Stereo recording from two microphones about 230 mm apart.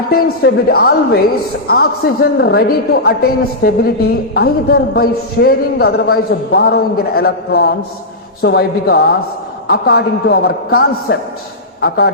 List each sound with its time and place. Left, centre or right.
0.1 s a man's voice: left